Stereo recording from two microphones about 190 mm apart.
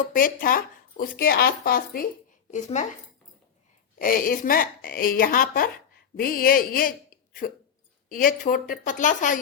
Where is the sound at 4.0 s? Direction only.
45° left (ahead or behind).